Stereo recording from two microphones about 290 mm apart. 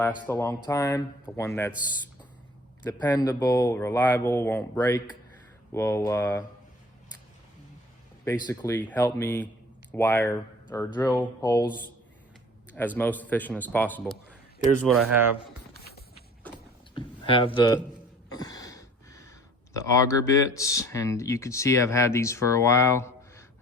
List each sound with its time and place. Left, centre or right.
0.3 s speech: centre
2.8 s speech: centre
8.2 s speech: centre
13.0 s a man's voice: centre
16.9 s speech: centre
18.3 s a sound: centre
19.7 s speech: centre